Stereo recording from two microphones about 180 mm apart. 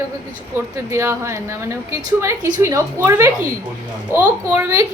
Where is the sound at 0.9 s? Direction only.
15° right (ahead or behind).